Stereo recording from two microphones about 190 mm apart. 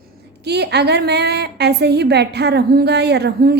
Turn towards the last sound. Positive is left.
turn(degrees=-60)  # may be behind; listen again after turning